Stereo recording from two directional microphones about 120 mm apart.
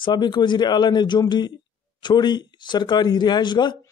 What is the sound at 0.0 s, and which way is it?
Speech, 40° left (ahead or behind).